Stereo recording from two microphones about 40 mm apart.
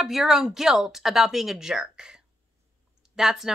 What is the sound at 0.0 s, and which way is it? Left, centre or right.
A woman's voice, centre.